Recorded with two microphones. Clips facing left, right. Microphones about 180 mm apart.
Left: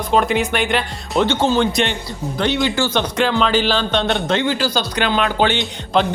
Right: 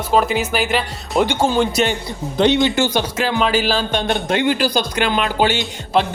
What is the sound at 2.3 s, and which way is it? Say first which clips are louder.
Speech: right 4 dB; 20° right (ahead or behind).